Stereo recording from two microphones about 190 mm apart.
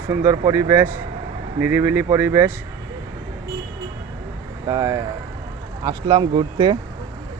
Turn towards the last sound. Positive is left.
turn(degrees=-20)  # may be behind; listen again after turning